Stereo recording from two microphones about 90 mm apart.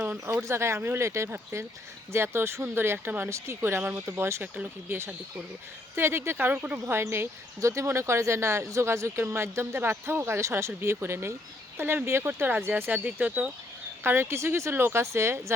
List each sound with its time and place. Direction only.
0.0 s speech: 25° right (ahead or behind)
4.5 s speech: 15° right (ahead or behind)
6.0 s speech: 25° right (ahead or behind)